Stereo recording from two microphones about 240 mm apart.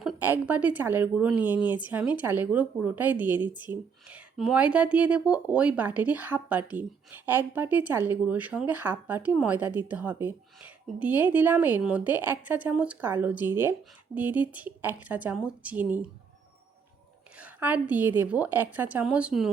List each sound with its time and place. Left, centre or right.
0.0 s a woman's voice: centre
17.3 s a woman's voice: centre